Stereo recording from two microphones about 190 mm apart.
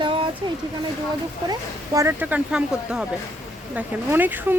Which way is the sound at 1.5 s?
15° right (ahead or behind).